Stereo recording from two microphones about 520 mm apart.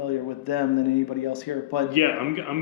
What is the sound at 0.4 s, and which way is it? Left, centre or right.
Speech, left.